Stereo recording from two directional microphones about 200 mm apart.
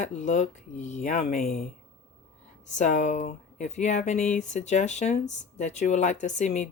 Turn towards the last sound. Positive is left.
turn(degrees=35)  # may be behind; listen again after turning